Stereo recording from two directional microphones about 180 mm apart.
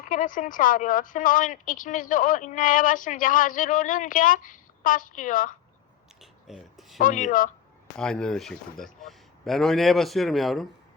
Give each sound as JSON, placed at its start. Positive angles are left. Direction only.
{"t": 0.1, "sound": "a woman's voice", "side_deg": 50}
{"t": 6.5, "sound": "a man's voice", "side_deg": 0}
{"t": 7.0, "sound": "a woman's voice", "side_deg": 45}
{"t": 7.9, "sound": "a man's voice", "side_deg": 5}